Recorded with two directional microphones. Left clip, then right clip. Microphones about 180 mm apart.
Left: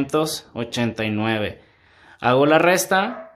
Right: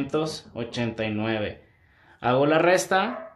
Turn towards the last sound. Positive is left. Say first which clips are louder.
# left 3 dB
turn(degrees=25)  # may be behind; listen again after turning